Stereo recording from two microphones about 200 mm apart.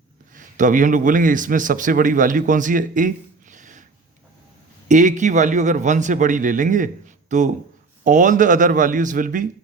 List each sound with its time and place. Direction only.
0.3 s a man's voice: 40° right (ahead or behind)
3.5 s a sound: 40° right (ahead or behind)
4.9 s a man's voice: 40° right (ahead or behind)